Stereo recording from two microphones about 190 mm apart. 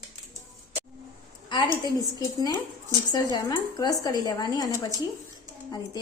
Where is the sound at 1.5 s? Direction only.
20° left (ahead or behind).